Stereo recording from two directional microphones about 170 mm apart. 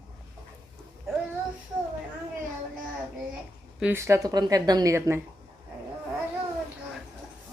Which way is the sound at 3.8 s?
15° right (ahead or behind).